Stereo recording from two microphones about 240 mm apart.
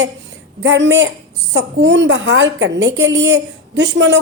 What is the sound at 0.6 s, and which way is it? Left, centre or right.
A woman's voice, right.